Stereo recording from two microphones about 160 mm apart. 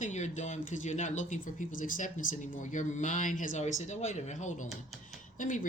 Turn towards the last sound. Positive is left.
turn(degrees=55)  # may be behind; listen again after turning